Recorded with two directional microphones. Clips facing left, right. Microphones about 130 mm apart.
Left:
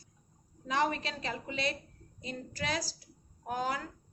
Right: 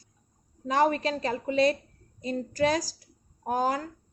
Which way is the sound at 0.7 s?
40° right (ahead or behind).